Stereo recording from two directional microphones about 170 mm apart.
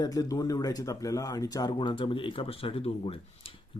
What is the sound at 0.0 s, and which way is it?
Speech, 20° left (ahead or behind).